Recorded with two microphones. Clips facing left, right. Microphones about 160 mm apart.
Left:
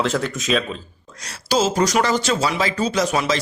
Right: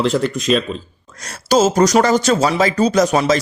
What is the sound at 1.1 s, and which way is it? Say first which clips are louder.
Speech: right 5 dB; 50° right (ahead or behind).